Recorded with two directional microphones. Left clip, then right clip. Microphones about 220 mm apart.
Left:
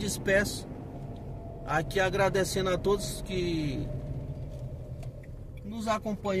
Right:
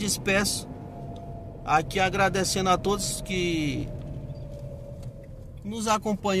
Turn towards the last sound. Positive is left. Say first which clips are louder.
# right 5 dB
turn(degrees=-20)  # may be behind; listen again after turning